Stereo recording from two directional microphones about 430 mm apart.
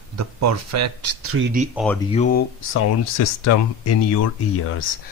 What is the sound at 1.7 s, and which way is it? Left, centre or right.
Speech, centre.